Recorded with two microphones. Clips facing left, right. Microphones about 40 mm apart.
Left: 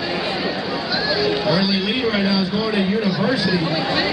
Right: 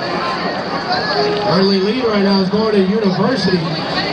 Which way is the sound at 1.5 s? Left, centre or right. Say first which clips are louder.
Right 6 dB; left.